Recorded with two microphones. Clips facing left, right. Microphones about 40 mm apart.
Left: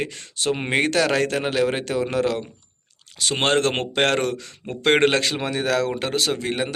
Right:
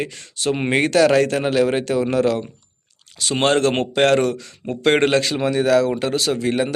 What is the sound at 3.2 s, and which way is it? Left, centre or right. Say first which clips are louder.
Speech: right 3 dB; left.